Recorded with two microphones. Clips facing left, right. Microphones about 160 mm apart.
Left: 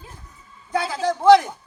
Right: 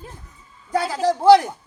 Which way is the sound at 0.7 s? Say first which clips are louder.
Right 2 dB; 40° right (ahead or behind).